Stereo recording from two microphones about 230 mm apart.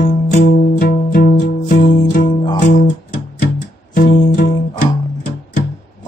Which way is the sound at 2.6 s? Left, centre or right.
Left.